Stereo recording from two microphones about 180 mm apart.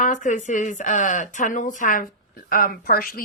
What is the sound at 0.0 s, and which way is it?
Speech, 45° left (ahead or behind).